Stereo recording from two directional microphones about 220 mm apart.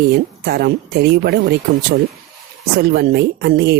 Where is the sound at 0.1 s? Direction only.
45° right (ahead or behind).